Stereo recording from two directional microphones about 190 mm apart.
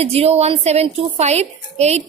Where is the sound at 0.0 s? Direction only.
30° right (ahead or behind).